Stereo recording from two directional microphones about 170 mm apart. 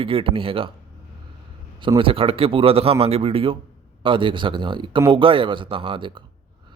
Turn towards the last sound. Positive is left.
turn(degrees=-30)  # may be behind; listen again after turning